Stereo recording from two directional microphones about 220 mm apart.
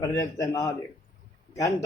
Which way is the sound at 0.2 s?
15° left (ahead or behind).